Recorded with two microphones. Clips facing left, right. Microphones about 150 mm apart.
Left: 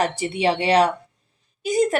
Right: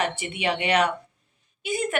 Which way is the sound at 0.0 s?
35° left (ahead or behind).